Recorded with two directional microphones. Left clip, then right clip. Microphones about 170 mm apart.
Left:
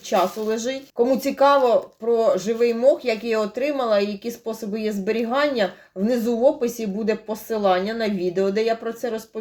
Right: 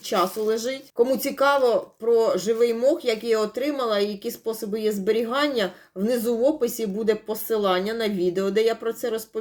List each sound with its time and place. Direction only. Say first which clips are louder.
0.1 s speech: left 2 dB; 35° right (ahead or behind)